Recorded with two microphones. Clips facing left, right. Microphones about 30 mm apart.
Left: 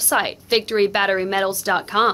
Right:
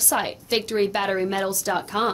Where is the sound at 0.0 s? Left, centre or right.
Left.